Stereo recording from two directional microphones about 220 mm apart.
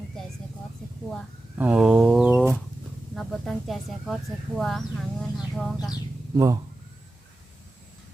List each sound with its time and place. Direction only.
1.1 s a sound: 5° right (ahead or behind)
3.2 s speech: centre (ahead or behind)
6.3 s speech: 15° right (ahead or behind)